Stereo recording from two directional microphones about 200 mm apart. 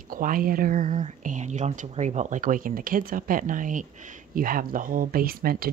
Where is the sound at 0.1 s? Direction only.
45° right (ahead or behind).